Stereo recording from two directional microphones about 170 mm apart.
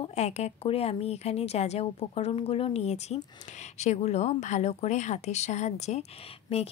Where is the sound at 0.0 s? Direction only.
40° left (ahead or behind).